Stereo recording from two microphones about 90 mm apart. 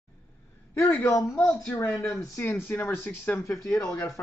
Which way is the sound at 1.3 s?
20° left (ahead or behind).